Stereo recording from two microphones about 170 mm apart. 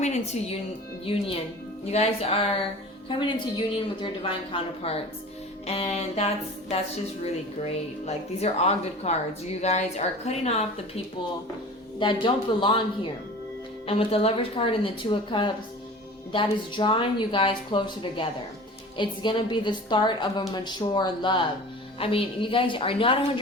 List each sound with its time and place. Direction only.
0.0 s a woman's voice: 40° left (ahead or behind)
11.9 s a woman's voice: 30° left (ahead or behind)
13.8 s a woman's voice: 35° left (ahead or behind)